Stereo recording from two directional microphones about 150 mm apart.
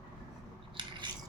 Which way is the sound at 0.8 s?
30° right (ahead or behind).